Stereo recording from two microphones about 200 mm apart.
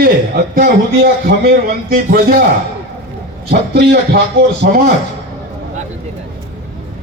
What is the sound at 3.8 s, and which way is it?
A man's voice, 55° right (ahead or behind).